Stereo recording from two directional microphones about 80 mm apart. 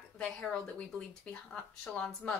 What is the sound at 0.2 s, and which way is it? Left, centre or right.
Speech, centre.